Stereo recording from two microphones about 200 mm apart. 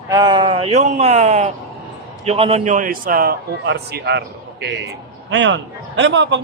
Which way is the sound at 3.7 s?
55° right (ahead or behind).